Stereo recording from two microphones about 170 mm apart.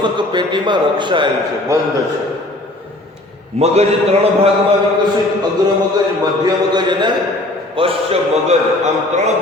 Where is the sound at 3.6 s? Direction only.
35° right (ahead or behind).